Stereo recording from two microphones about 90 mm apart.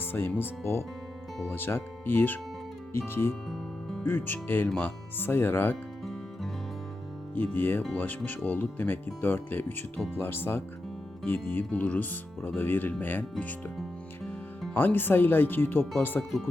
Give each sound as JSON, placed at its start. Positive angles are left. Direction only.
{"t": 0.0, "sound": "speech", "side_deg": 25}
{"t": 3.5, "sound": "music", "side_deg": 0}
{"t": 4.0, "sound": "speech", "side_deg": 20}
{"t": 7.3, "sound": "speech", "side_deg": 20}
{"t": 14.7, "sound": "speech", "side_deg": 20}